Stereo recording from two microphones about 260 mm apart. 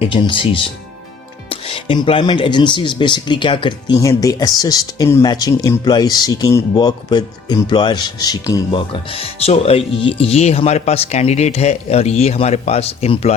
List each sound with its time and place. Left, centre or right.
0.0 s speech: centre